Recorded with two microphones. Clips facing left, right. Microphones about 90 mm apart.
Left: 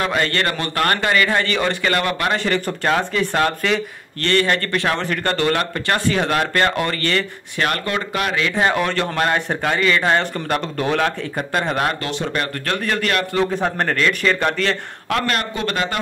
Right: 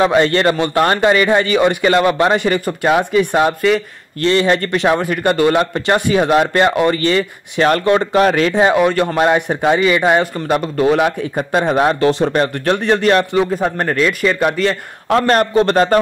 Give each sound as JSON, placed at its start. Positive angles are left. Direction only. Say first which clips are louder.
{"t": 0.0, "sound": "speech", "louder": "right 8 dB", "side_deg": -20}
{"t": 7.6, "sound": "speech", "louder": "right 9 dB", "side_deg": -30}
{"t": 8.5, "sound": "speech", "louder": "right 4 dB", "side_deg": -15}
{"t": 13.4, "sound": "speech", "louder": "right 3 dB", "side_deg": -5}
{"t": 15.0, "sound": "speech", "louder": "right 8 dB", "side_deg": -30}